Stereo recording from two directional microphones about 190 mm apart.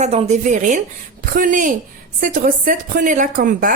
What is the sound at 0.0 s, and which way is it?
A woman's voice, 35° right (ahead or behind).